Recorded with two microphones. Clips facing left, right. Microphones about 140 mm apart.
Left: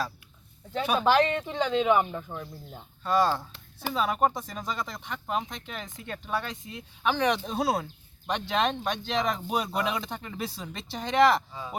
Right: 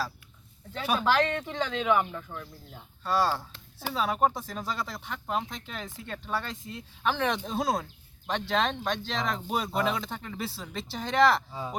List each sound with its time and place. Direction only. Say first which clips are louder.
0.9 s speech: left 3 dB; 15° left (ahead or behind)
3.0 s speech: left 2 dB; centre (ahead or behind)